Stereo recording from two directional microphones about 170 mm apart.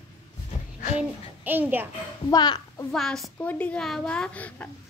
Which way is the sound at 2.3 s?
20° left (ahead or behind).